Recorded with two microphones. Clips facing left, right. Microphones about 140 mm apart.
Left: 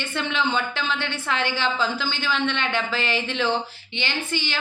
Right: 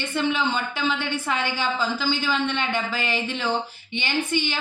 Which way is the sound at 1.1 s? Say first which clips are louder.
Even; 10° right (ahead or behind).